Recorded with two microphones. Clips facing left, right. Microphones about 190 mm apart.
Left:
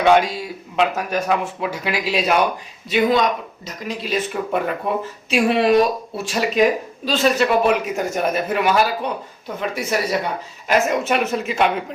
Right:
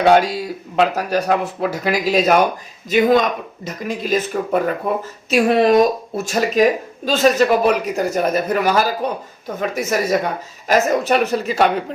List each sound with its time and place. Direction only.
0.0 s speech: 35° right (ahead or behind)